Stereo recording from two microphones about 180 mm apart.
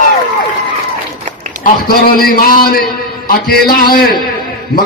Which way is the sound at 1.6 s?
55° left (ahead or behind).